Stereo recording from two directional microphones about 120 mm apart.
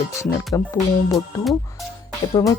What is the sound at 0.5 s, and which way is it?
Speech, 25° left (ahead or behind).